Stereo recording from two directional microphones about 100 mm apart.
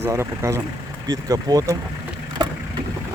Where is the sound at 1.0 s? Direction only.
40° right (ahead or behind).